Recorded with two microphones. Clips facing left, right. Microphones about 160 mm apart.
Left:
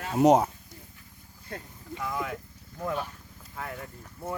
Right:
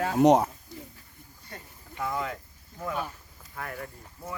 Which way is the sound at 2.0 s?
Centre (ahead or behind).